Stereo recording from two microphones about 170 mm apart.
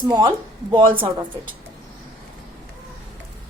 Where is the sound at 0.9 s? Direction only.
15° right (ahead or behind).